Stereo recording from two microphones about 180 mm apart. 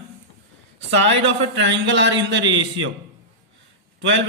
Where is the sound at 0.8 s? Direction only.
90° right.